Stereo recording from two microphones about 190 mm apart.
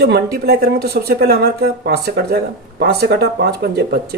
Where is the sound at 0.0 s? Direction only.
55° right (ahead or behind).